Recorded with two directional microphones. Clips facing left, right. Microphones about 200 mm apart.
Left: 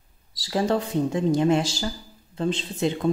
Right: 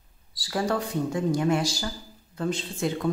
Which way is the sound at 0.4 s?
25° left (ahead or behind).